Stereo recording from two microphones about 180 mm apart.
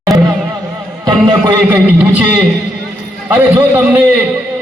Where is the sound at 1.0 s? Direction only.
25° right (ahead or behind).